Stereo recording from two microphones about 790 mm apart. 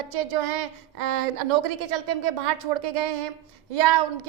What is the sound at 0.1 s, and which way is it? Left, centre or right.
A woman's voice, right.